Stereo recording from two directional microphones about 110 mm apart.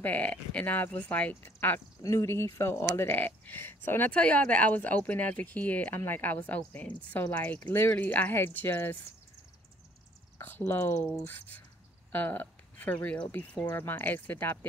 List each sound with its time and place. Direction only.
0.0 s speech: 15° left (ahead or behind)
10.4 s speech: 20° left (ahead or behind)